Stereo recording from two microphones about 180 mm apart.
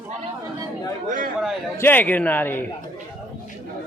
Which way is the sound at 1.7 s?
10° left (ahead or behind).